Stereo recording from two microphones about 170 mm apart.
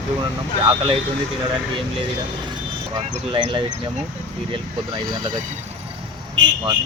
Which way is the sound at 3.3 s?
30° right (ahead or behind).